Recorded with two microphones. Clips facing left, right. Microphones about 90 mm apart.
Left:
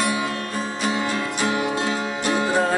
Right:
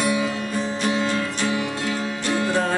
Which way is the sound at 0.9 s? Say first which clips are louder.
Right 1 dB; 15° left (ahead or behind).